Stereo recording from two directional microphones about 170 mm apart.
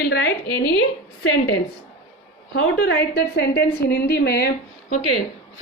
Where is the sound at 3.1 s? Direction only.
70° left (ahead or behind).